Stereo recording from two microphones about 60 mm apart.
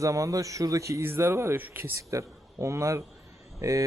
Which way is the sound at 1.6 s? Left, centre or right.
Right.